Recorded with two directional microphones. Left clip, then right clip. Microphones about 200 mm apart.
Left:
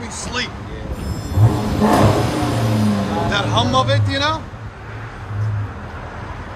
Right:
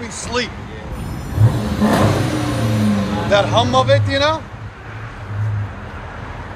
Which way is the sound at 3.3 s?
10° left (ahead or behind).